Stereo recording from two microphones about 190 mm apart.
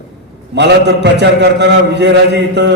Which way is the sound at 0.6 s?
65° right (ahead or behind).